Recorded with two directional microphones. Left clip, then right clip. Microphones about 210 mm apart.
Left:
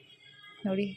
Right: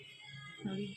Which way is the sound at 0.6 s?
40° left (ahead or behind).